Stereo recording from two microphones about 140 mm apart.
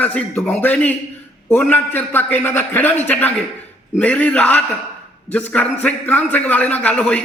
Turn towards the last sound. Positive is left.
turn(degrees=10)  # may be behind; listen again after turning